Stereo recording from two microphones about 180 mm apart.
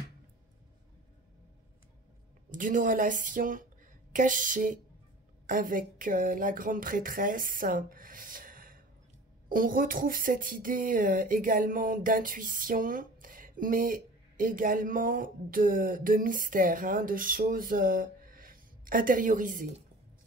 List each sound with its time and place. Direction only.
2.5 s a woman's voice: 50° right (ahead or behind)